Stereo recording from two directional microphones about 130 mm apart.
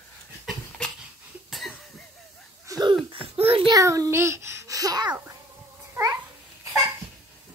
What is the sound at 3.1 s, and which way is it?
Babbling, 45° right (ahead or behind).